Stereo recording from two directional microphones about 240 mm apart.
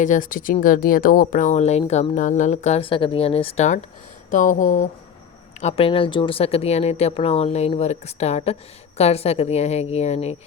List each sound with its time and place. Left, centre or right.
0.0 s speech: left